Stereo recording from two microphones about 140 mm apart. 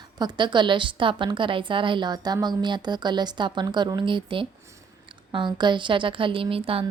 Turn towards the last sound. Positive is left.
turn(degrees=-40)  # may be behind; listen again after turning